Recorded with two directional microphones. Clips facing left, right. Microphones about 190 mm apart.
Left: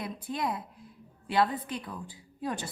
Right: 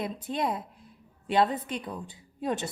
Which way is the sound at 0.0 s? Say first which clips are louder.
Right 3 dB; 25° right (ahead or behind).